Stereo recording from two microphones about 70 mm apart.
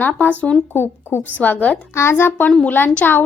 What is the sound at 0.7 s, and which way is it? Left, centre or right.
Speech, left.